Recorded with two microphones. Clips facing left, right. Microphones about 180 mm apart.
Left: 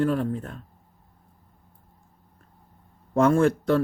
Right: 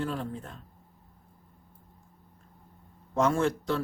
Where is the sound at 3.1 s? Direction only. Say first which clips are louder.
Left 6 dB; 55° left (ahead or behind).